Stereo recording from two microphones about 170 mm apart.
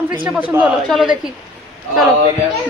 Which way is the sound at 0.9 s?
Centre (ahead or behind).